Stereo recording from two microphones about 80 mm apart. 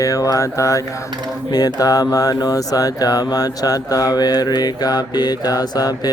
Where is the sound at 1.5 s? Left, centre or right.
Left.